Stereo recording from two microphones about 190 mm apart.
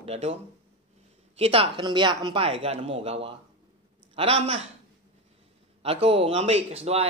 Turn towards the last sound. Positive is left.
turn(degrees=-35)  # may be behind; listen again after turning